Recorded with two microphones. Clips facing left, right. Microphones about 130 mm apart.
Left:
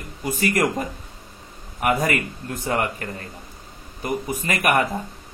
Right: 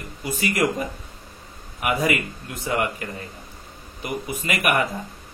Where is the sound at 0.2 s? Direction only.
45° left (ahead or behind).